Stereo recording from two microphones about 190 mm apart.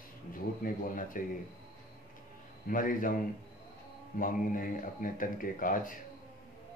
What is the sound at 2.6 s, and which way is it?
Speech, 45° left (ahead or behind).